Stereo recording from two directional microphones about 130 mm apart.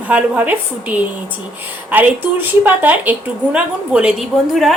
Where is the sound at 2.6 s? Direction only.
15° right (ahead or behind).